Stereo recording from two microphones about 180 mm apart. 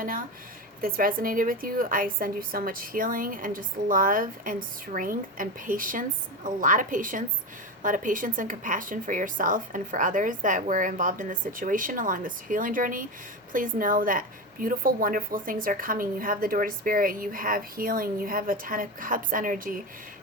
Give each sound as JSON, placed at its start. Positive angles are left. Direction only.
{"t": 0.0, "sound": "a woman's voice", "side_deg": -50}